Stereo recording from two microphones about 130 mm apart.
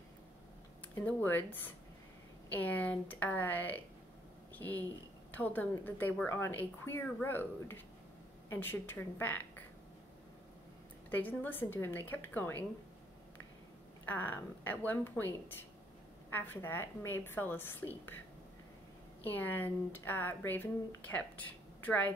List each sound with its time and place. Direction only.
1.0 s speech: 15° left (ahead or behind)
11.1 s speech: 15° left (ahead or behind)
14.0 s speech: 15° left (ahead or behind)
19.2 s speech: 15° left (ahead or behind)